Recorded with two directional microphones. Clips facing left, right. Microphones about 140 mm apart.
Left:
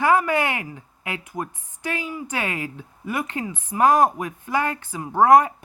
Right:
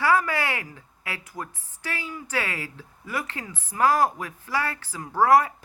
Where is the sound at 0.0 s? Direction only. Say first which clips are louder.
Left 4 dB; 20° left (ahead or behind).